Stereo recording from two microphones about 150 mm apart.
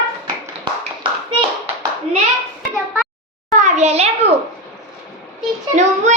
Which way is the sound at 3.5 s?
50° right (ahead or behind).